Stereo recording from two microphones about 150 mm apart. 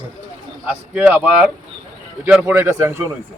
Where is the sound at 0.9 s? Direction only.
10° right (ahead or behind).